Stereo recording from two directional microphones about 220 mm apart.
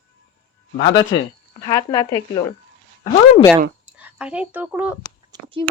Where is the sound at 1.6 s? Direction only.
15° left (ahead or behind).